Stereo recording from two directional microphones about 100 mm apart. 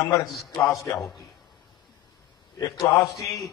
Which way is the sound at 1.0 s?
Centre (ahead or behind).